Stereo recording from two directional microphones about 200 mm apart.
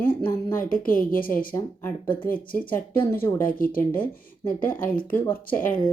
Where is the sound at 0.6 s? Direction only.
45° left (ahead or behind).